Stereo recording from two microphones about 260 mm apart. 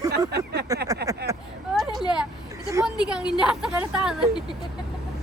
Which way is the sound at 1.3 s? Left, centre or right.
Centre.